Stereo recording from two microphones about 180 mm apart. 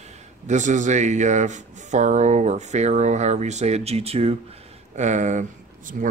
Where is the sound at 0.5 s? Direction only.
40° right (ahead or behind).